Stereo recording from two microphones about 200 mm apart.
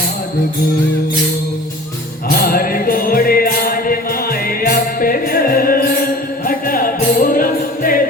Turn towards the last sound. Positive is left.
turn(degrees=45)  # may be behind; listen again after turning